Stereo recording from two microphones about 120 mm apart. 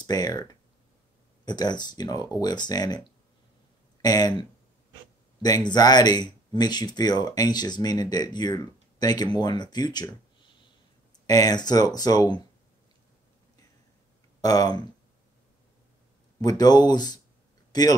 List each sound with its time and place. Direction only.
0.0 s speech: 35° left (ahead or behind)
4.0 s speech: 35° left (ahead or behind)
11.2 s speech: 30° left (ahead or behind)
14.4 s speech: 30° left (ahead or behind)
16.3 s speech: 35° left (ahead or behind)